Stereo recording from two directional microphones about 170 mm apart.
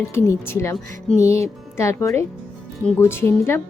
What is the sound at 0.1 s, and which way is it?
Speech, 15° left (ahead or behind).